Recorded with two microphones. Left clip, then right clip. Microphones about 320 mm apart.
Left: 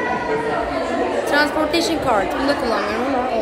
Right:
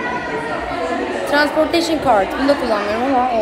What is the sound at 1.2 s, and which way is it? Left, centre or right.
A woman's voice, centre.